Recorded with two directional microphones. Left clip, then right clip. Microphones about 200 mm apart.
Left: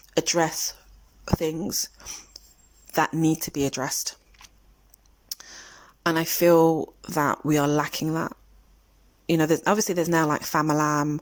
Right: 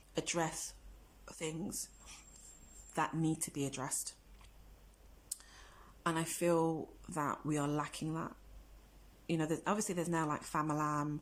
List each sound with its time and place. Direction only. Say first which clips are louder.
0.1 s speech: left 14 dB; 40° left (ahead or behind)
4.4 s a sound: left 14 dB; 45° left (ahead or behind)
5.4 s speech: left 14 dB; 45° left (ahead or behind)